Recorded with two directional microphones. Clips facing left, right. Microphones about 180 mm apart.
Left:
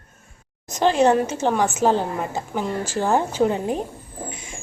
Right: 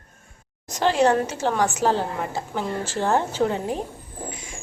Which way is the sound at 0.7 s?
20° left (ahead or behind).